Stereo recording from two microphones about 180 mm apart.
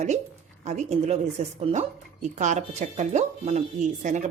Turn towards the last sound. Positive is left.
turn(degrees=-45)  # may be behind; listen again after turning